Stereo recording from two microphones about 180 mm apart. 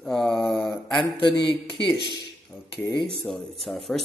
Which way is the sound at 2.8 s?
15° left (ahead or behind).